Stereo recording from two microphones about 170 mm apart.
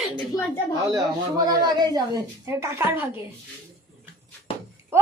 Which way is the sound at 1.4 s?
25° right (ahead or behind).